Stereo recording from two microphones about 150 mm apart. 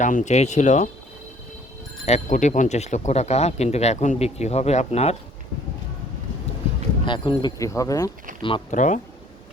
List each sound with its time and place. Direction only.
0.0 s speech: 55° left (ahead or behind)
2.0 s speech: 50° left (ahead or behind)
7.0 s speech: 35° left (ahead or behind)
7.6 s speech: 20° left (ahead or behind)
8.4 s speech: 35° left (ahead or behind)
8.7 s speech: 55° left (ahead or behind)